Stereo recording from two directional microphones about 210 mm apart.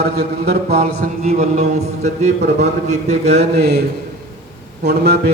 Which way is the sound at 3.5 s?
50° right (ahead or behind).